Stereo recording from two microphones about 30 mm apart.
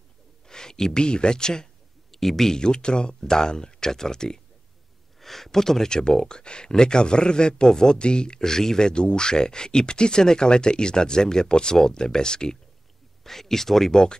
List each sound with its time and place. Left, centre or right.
0.5 s a sound: left
0.9 s speech: left
2.1 s speech: centre
2.6 s speech: left
5.2 s speech: centre; by 12.5 s left
13.2 s speech: centre